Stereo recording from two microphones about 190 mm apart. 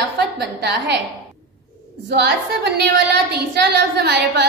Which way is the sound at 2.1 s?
60° right (ahead or behind).